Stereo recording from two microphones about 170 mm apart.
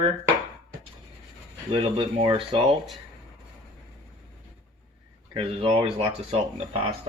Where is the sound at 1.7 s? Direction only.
30° right (ahead or behind).